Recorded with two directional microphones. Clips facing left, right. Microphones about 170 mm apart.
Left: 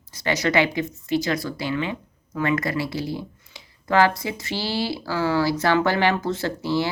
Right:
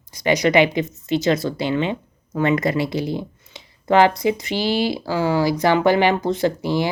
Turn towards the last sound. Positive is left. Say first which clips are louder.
# right 4 dB
turn(degrees=-15)  # may be behind; listen again after turning